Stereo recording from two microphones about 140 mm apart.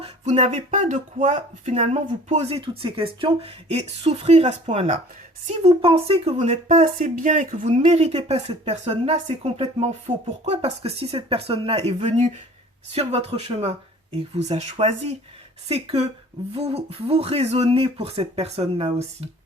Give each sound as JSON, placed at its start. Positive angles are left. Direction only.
{"t": 0.0, "sound": "speech", "side_deg": -55}